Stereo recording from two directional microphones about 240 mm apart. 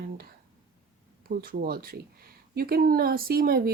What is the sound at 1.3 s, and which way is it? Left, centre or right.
Speech, right.